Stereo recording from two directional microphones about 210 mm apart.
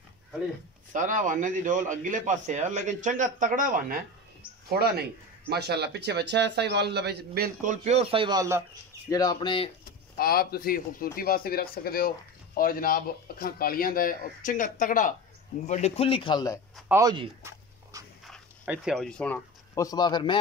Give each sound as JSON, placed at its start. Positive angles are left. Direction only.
{"t": 0.9, "sound": "a man's voice", "side_deg": -35}
{"t": 9.1, "sound": "a man's voice", "side_deg": 20}
{"t": 10.1, "sound": "a man's voice", "side_deg": 45}
{"t": 16.9, "sound": "writing", "side_deg": -20}
{"t": 18.2, "sound": "speech", "side_deg": 0}